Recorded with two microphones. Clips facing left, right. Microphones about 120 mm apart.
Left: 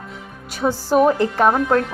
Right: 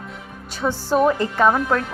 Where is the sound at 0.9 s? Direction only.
10° left (ahead or behind).